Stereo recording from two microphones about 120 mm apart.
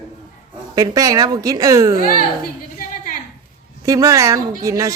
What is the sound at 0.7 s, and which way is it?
A woman's voice, 30° right (ahead or behind).